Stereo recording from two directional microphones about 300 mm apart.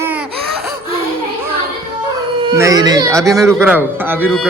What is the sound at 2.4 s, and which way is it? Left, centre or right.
Speech, centre.